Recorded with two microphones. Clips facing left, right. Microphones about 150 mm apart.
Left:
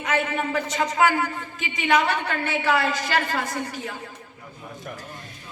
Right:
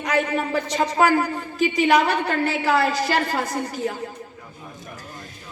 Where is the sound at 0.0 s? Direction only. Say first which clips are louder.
Right 2 dB; 40° right (ahead or behind).